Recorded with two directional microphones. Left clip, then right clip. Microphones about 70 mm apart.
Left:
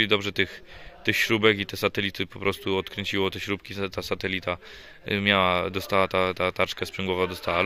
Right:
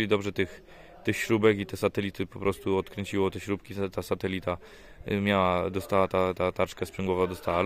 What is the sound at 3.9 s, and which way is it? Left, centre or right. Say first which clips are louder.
Speech: left 3 dB; right.